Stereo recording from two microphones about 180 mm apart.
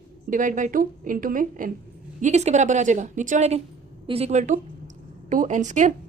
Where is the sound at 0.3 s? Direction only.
45° right (ahead or behind).